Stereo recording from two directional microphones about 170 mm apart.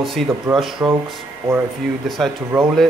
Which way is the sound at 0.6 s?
Centre (ahead or behind).